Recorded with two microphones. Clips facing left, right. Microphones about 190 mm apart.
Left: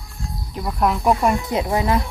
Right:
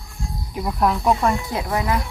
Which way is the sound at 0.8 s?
Centre (ahead or behind).